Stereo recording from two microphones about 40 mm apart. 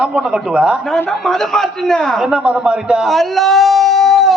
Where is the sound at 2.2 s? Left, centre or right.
Right.